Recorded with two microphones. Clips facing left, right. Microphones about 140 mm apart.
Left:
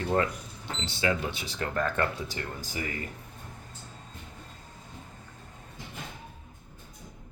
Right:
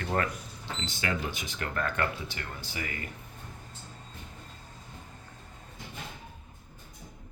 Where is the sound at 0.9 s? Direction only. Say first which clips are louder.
Left 4 dB; 30° left (ahead or behind).